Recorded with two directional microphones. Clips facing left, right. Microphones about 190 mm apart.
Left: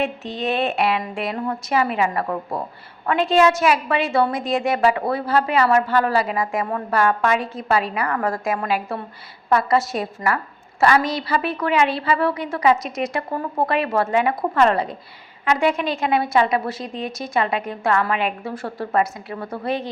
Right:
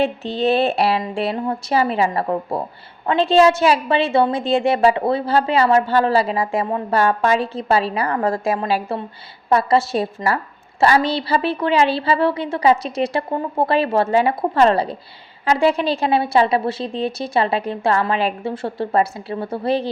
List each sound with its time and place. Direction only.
0.0 s a woman's voice: 30° right (ahead or behind)